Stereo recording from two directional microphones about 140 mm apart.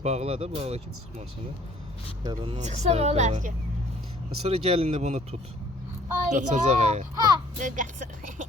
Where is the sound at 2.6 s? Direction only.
50° right (ahead or behind).